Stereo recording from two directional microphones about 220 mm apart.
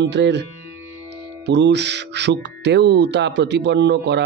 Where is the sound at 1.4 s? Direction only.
50° right (ahead or behind).